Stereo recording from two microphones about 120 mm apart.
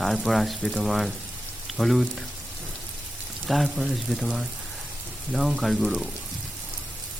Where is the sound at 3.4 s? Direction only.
Centre (ahead or behind).